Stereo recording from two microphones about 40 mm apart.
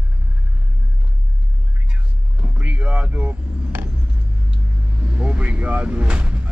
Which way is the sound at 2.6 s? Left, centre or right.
Right.